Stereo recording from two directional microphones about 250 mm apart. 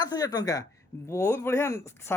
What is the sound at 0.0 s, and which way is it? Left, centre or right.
A man's voice, centre.